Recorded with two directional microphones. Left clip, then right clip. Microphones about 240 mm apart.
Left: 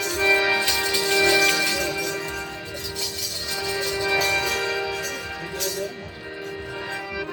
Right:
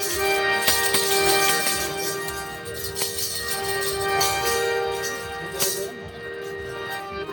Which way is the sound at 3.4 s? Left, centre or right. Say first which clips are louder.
Right 1 dB; left.